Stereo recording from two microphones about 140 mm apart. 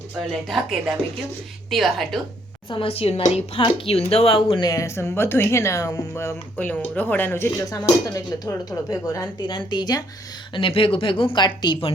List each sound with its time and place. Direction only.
0.3 s speech: centre (ahead or behind)
2.6 s speech: 40° left (ahead or behind)
4.6 s speech: 25° left (ahead or behind)